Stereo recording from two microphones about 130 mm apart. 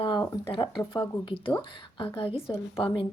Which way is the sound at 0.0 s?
35° left (ahead or behind).